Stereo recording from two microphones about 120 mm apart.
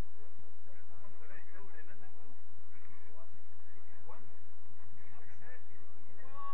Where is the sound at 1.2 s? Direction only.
35° left (ahead or behind).